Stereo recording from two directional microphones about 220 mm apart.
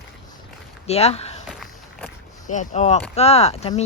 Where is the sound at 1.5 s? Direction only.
Centre (ahead or behind).